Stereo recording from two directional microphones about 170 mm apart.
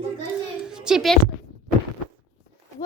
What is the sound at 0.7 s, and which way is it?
Speech, 5° right (ahead or behind).